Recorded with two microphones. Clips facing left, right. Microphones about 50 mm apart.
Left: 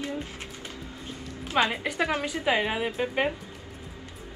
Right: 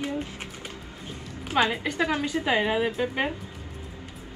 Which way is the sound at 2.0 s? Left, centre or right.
Left.